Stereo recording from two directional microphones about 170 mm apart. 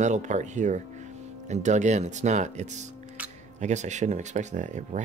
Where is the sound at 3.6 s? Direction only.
45° right (ahead or behind).